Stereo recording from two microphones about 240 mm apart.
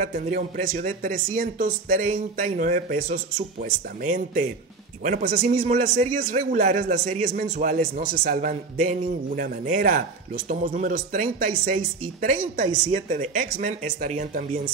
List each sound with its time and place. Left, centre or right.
0.0 s speech: right